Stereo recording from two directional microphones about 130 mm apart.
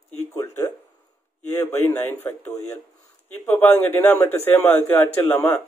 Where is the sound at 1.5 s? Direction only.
20° left (ahead or behind).